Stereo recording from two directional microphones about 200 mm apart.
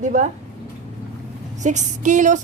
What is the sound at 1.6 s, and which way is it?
Speech, 40° right (ahead or behind).